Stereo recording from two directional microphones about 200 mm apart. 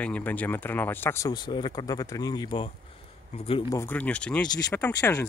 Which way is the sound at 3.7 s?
10° left (ahead or behind).